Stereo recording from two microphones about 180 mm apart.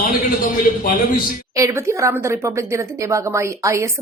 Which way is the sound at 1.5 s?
15° right (ahead or behind).